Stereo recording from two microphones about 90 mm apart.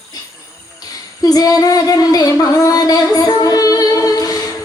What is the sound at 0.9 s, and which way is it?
Female singing, 45° left (ahead or behind).